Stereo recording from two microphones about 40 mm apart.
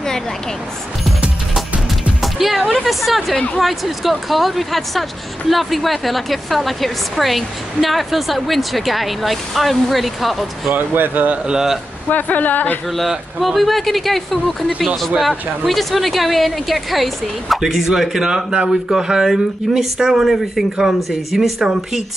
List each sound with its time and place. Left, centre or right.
2.2 s speech: centre
10.7 s speech: right
11.4 s speech: centre
12.1 s speech: left
13.4 s speech: centre
17.6 s speech: centre